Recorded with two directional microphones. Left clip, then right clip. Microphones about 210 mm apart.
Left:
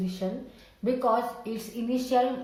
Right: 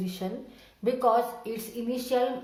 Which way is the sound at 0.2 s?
50° right (ahead or behind).